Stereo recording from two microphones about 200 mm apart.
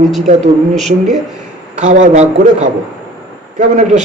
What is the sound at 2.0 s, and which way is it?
A man's voice, 35° right (ahead or behind).